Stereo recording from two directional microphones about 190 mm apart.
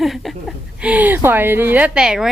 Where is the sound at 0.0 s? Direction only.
Centre (ahead or behind).